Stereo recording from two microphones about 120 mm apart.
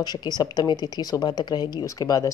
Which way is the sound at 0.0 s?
35° left (ahead or behind).